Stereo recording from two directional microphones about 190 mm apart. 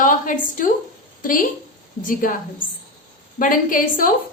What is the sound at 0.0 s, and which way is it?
A woman's voice, 45° left (ahead or behind).